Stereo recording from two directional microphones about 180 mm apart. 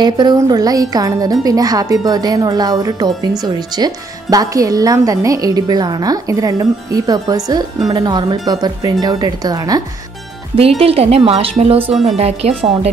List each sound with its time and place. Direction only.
0.0 s speech: 25° right (ahead or behind)
10.8 s a woman's voice: 35° right (ahead or behind)